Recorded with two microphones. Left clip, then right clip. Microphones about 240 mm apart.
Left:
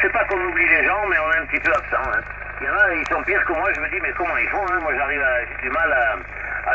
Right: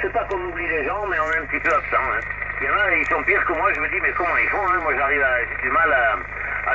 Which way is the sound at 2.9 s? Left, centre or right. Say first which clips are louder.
Right 2 dB; left.